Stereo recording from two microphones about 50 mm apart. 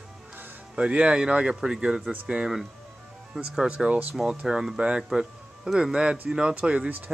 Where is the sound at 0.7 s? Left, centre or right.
Right.